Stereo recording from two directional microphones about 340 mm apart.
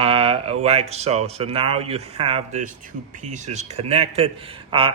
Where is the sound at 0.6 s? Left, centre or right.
Centre.